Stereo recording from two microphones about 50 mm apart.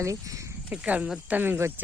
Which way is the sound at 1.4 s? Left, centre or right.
Right.